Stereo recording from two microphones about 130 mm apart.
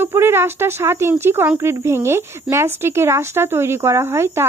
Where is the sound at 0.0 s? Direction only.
20° right (ahead or behind).